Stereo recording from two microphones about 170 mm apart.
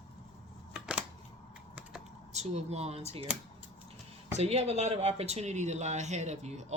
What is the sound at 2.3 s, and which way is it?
Speech, 40° right (ahead or behind).